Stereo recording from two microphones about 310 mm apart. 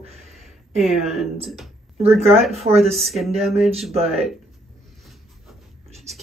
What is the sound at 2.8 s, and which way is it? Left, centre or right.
Speech, centre.